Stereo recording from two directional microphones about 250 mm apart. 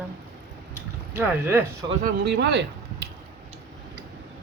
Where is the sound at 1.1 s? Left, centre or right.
Centre.